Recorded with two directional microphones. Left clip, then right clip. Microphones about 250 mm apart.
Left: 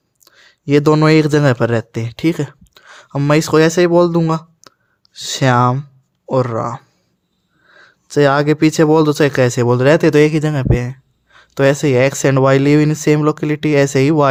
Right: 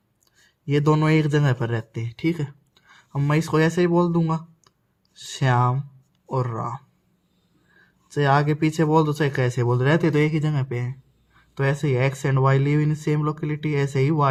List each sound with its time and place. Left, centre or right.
0.3 s speech: left